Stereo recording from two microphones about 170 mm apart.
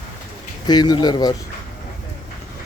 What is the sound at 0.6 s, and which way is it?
Speech, 25° left (ahead or behind).